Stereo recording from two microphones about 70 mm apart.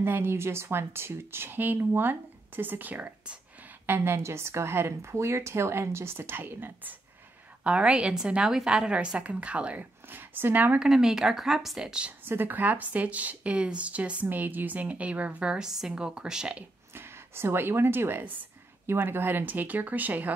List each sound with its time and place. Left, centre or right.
0.0 s speech: right
3.8 s speech: right
7.6 s a woman's voice: centre
10.1 s speech: right
10.8 s a woman's voice: centre
12.3 s a woman's voice: right; by 16.6 s centre
16.9 s speech: right